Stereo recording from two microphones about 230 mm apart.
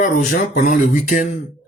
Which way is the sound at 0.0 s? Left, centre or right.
Left.